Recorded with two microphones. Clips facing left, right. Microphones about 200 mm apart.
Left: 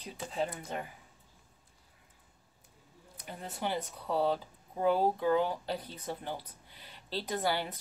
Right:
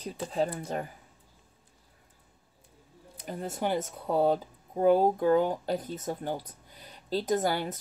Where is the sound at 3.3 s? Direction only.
40° right (ahead or behind).